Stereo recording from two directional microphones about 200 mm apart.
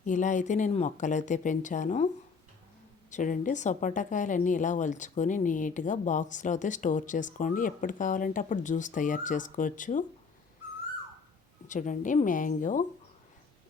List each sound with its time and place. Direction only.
0.0 s speech: 40° left (ahead or behind)
3.1 s speech: 40° left (ahead or behind)
11.7 s speech: 40° left (ahead or behind)